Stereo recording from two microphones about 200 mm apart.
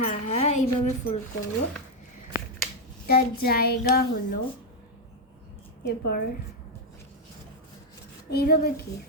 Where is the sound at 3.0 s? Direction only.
50° left (ahead or behind).